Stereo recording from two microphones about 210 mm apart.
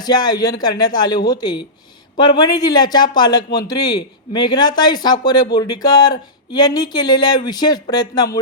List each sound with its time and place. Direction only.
0.0 s speech: 20° left (ahead or behind)